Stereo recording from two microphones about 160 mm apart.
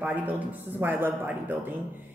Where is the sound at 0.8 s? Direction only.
10° right (ahead or behind).